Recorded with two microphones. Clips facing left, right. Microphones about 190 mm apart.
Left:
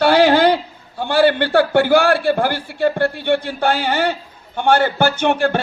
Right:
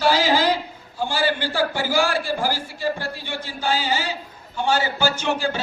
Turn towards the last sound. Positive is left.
turn(degrees=60)  # may be behind; listen again after turning